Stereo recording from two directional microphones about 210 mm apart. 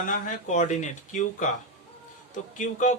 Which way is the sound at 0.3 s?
35° left (ahead or behind).